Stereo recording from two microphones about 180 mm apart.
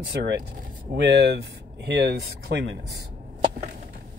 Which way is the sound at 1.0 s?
70° right (ahead or behind).